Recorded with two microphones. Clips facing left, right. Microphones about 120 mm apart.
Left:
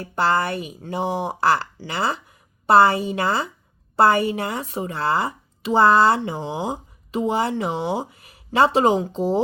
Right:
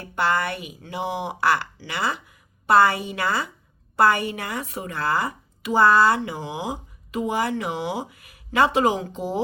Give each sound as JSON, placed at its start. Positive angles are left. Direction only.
{"t": 0.0, "sound": "a woman's voice", "side_deg": 35}